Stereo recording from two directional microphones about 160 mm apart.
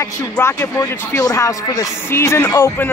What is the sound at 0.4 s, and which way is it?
Speech, 20° left (ahead or behind).